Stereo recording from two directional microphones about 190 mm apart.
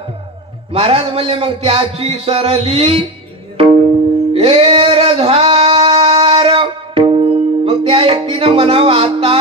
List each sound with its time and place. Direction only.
0.7 s speech: 30° right (ahead or behind)
4.3 s music: 30° right (ahead or behind)